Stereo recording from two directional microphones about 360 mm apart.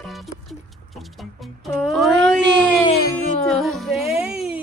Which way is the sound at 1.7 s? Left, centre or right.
Centre.